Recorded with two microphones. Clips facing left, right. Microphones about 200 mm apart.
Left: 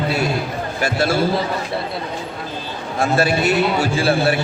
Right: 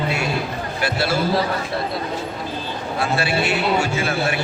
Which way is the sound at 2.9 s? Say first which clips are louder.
Left 4 dB; 45° left (ahead or behind).